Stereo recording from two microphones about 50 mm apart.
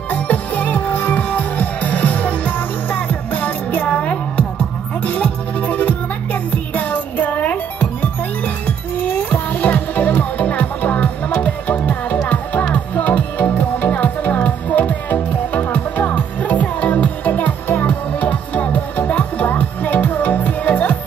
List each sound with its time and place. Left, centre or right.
0.1 s music: left